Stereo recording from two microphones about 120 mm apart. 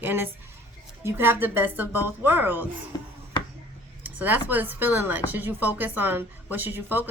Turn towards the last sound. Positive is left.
turn(degrees=-15)  # may be behind; listen again after turning